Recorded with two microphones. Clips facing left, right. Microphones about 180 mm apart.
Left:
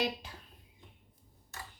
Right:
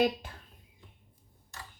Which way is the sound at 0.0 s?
50° right (ahead or behind).